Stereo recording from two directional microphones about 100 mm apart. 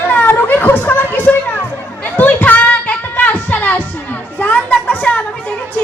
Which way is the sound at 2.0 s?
15° left (ahead or behind).